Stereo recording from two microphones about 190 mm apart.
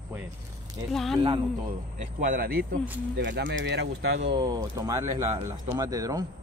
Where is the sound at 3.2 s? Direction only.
70° right (ahead or behind).